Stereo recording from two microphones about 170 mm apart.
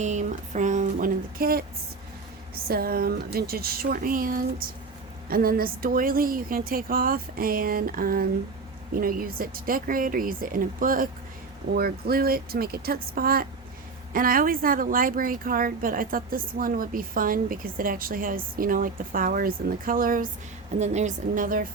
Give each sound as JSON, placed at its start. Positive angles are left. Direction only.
{"t": 0.0, "sound": "speech", "side_deg": -45}
{"t": 2.6, "sound": "speech", "side_deg": -60}
{"t": 20.7, "sound": "speech", "side_deg": -40}